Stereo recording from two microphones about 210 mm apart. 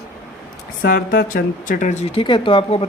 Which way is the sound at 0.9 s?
45° left (ahead or behind).